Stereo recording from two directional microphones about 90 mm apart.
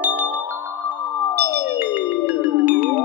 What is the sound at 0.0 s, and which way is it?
Glockenspiel, 20° right (ahead or behind).